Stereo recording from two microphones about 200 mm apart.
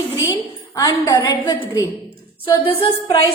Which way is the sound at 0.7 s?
20° left (ahead or behind).